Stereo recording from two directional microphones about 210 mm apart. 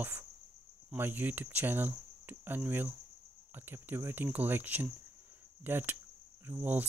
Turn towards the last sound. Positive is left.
turn(degrees=-10)  # may be behind; listen again after turning